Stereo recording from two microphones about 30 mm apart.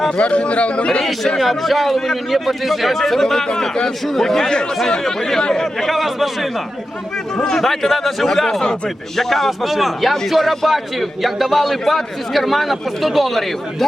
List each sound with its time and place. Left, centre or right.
0.2 s speech: left
1.4 s a man's voice: centre
4.4 s speech: left
5.9 s a man's voice: centre
7.3 s a man's voice: centre